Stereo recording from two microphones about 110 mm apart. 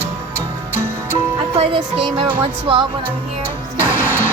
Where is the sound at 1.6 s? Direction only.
50° right (ahead or behind).